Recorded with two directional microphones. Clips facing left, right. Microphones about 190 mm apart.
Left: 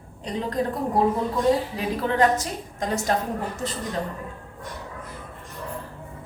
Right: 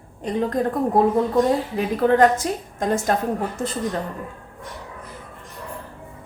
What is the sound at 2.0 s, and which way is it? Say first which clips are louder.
Speech: right 10 dB; 50° right (ahead or behind).